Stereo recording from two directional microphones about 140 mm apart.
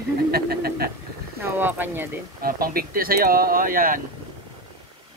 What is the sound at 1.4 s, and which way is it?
Speech, 15° right (ahead or behind).